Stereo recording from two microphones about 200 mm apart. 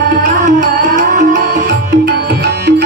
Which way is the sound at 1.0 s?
40° right (ahead or behind).